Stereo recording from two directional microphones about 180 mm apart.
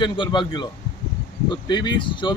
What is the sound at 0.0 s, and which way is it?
Speech, 25° left (ahead or behind).